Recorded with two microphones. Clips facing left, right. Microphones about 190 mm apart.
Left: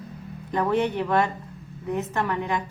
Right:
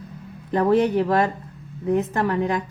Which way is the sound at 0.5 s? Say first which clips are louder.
Right 5 dB; 35° right (ahead or behind).